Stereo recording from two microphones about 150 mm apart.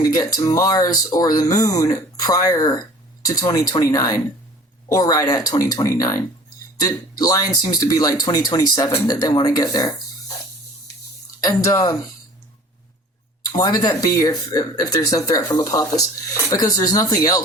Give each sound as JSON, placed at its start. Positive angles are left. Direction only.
{"t": 0.0, "sound": "speech", "side_deg": 25}
{"t": 11.7, "sound": "speech", "side_deg": 25}
{"t": 13.5, "sound": "speech", "side_deg": 25}